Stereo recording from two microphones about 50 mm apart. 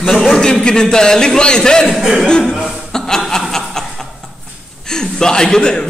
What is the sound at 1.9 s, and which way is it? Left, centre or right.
Speech, centre.